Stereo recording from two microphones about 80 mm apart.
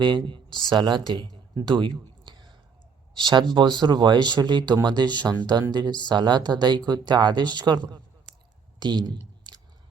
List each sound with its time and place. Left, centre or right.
0.0 s speech: right
1.5 s a sound: right
3.2 s speech: right
8.8 s clicking: right